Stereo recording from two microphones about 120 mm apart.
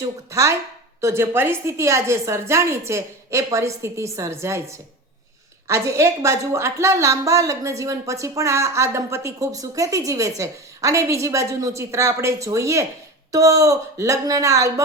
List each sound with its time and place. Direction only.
0.3 s a woman's voice: 25° right (ahead or behind)